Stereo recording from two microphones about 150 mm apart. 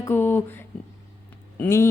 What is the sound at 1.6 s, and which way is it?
Speech, 20° left (ahead or behind).